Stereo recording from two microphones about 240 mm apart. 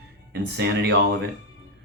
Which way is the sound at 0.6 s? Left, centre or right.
Right.